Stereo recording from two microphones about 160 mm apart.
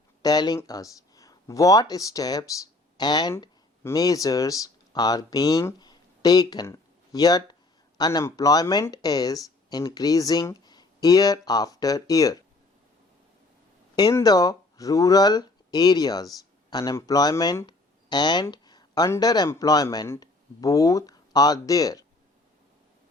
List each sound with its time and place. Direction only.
0.2 s speech: 25° left (ahead or behind)
13.9 s a man's voice: 20° left (ahead or behind)